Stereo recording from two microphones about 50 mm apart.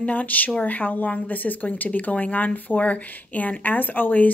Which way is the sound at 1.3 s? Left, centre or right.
Left.